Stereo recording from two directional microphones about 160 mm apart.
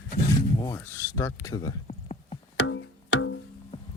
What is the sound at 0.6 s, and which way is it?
Speech, 20° left (ahead or behind).